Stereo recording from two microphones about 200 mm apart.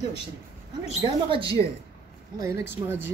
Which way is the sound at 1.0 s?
25° right (ahead or behind).